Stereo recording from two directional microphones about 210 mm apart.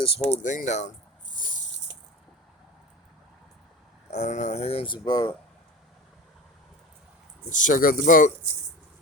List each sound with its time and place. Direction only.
0.0 s speech: 30° left (ahead or behind)
1.3 s a sound: 40° left (ahead or behind)
4.1 s speech: 35° left (ahead or behind)
7.5 s speech: 40° left (ahead or behind)